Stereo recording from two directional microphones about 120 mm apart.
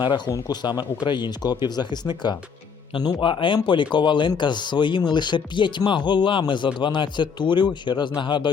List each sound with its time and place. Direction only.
0.3 s speech: 35° left (ahead or behind)